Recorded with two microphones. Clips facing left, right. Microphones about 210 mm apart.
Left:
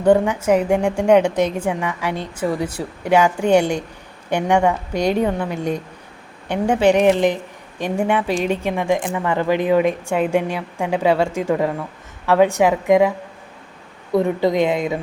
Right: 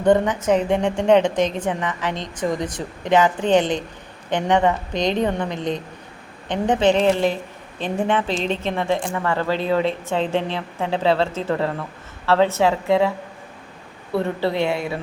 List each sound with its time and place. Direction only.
0.0 s a woman's voice: 10° left (ahead or behind)